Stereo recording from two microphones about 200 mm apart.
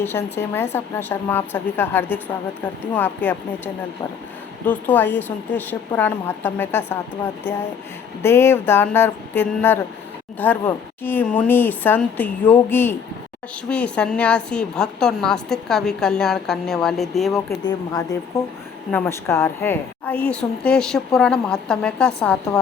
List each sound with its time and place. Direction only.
0.0 s speech: 10° left (ahead or behind)
4.6 s speech: 10° left (ahead or behind)
8.2 s a woman's voice: 10° left (ahead or behind)
17.6 s a woman's voice: 20° left (ahead or behind)